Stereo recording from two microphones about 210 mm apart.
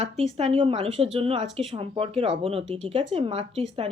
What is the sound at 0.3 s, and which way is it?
Speech, 30° right (ahead or behind).